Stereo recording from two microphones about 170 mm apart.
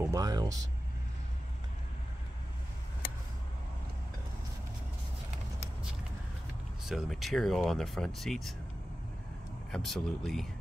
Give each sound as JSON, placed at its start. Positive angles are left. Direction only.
{"t": 0.1, "sound": "speech", "side_deg": -20}
{"t": 6.8, "sound": "speech", "side_deg": 0}
{"t": 9.7, "sound": "speech", "side_deg": 0}